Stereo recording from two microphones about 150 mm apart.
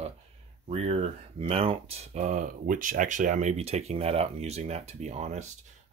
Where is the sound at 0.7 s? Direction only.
40° right (ahead or behind).